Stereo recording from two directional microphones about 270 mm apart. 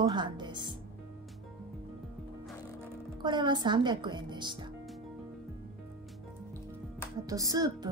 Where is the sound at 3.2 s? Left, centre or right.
Centre.